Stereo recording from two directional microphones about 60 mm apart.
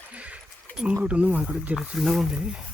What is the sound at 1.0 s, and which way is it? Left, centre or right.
Speech, right.